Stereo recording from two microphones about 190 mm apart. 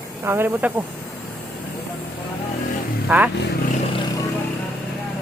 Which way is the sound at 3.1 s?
5° right (ahead or behind).